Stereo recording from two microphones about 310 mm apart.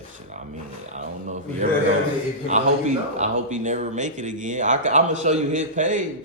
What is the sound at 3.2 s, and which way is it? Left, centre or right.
Speech, right.